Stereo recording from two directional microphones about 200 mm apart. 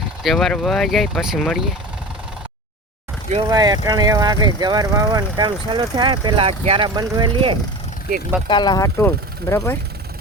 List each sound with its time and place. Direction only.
0.2 s speech: centre (ahead or behind)
3.3 s speech: 20° right (ahead or behind)
8.4 s speech: 20° left (ahead or behind)